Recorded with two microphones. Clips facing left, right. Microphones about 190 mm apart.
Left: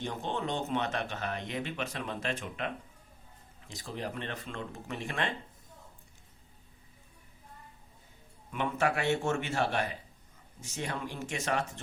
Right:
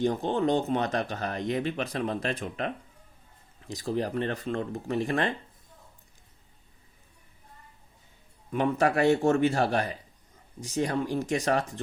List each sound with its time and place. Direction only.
0.0 s speech: 35° right (ahead or behind)
8.4 s speech: 40° right (ahead or behind)